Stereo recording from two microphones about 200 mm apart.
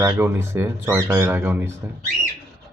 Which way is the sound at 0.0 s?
10° right (ahead or behind).